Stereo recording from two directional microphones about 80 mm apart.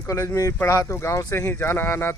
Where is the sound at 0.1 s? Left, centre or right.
Left.